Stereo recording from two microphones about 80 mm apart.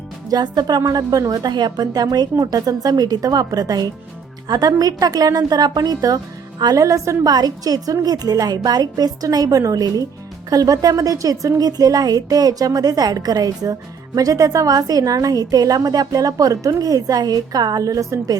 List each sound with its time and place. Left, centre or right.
0.3 s a woman's voice: right
7.3 s a woman's voice: right